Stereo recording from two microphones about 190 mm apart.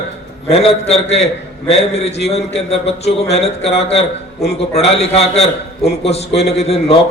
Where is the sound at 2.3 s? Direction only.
35° left (ahead or behind).